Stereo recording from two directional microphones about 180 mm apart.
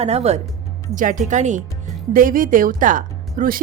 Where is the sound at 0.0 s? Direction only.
35° right (ahead or behind).